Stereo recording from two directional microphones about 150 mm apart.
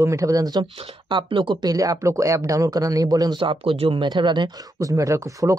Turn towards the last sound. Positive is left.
turn(degrees=-20)  # may be behind; listen again after turning